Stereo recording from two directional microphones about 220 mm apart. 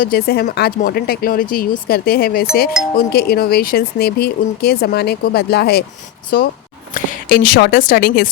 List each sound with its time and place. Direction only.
0.0 s a woman's voice: 45° left (ahead or behind)